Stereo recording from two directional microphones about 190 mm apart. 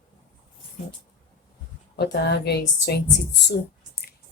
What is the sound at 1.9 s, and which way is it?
A woman's voice, 60° left (ahead or behind).